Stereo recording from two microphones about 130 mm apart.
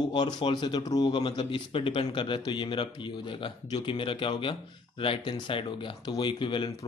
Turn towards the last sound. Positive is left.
turn(degrees=40)  # may be behind; listen again after turning